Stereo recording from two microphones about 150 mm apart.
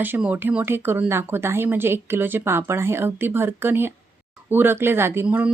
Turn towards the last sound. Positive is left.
turn(degrees=-10)  # may be behind; listen again after turning